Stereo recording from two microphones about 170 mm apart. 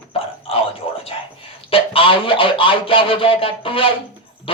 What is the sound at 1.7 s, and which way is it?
Speech, 35° left (ahead or behind).